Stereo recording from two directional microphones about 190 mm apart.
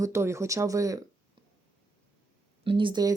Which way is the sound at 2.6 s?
25° right (ahead or behind).